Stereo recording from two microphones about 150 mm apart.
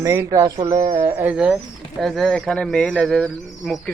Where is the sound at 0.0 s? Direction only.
20° right (ahead or behind).